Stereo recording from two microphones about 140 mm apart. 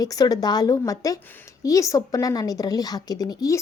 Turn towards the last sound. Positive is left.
turn(degrees=25)  # may be behind; listen again after turning